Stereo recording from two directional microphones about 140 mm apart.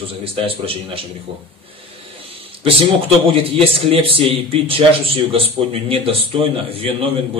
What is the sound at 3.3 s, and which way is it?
A man's voice, 40° right (ahead or behind).